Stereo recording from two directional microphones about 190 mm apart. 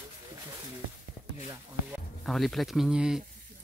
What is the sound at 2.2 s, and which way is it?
Speech, centre (ahead or behind).